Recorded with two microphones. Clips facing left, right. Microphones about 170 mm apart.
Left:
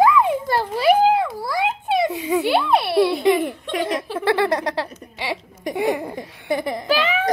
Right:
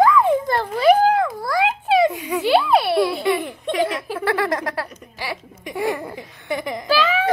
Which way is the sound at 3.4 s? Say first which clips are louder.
Right 2 dB; 50° left (ahead or behind).